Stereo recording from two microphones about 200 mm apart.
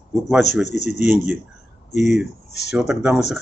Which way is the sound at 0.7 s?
35° left (ahead or behind).